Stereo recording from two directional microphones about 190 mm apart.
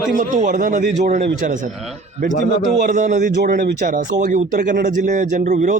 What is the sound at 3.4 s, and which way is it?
A man's voice, 55° right (ahead or behind).